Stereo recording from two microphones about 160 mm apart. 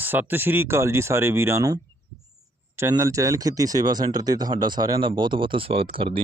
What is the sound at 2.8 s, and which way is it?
Speech, 20° right (ahead or behind).